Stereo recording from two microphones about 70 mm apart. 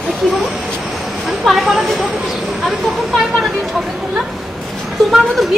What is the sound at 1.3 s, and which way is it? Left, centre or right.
Speech, centre.